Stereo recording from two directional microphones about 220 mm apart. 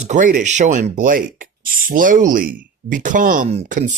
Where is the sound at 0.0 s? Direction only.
35° right (ahead or behind).